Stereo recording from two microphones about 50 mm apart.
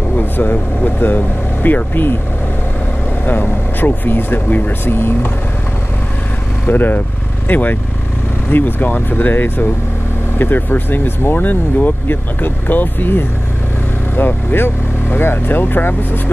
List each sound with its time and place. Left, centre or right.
0.2 s speech: left
3.3 s speech: left
4.8 s speech: left
6.6 s speech: left